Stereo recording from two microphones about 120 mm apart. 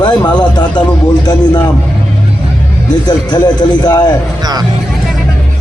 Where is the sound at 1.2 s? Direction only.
40° left (ahead or behind).